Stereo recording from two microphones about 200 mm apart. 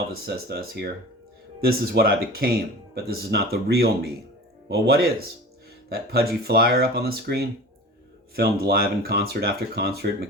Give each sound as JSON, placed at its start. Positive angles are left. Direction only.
{"t": 0.1, "sound": "speech", "side_deg": -50}